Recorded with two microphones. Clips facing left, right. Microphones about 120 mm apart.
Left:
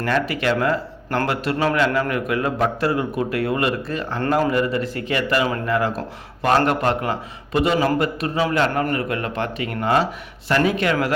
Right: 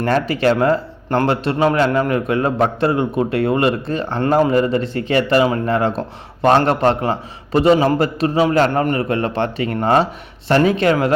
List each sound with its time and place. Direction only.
0.0 s a man's voice: 30° right (ahead or behind)